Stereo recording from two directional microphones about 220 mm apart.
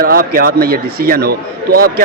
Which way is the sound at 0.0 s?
40° right (ahead or behind).